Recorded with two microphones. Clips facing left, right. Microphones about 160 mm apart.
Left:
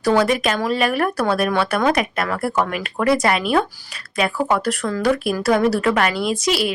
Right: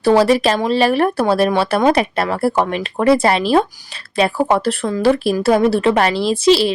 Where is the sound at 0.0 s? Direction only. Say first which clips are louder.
Right 5 dB; 30° right (ahead or behind).